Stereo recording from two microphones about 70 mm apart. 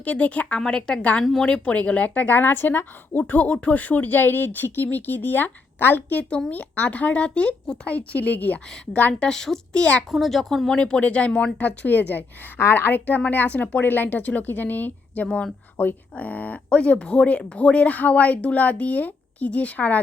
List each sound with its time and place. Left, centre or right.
0.0 s speech: centre
1.2 s speech: centre
1.5 s speech: centre
10.1 s speech: centre; by 20.0 s left